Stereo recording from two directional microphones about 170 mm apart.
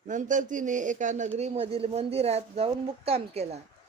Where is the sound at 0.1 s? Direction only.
50° right (ahead or behind).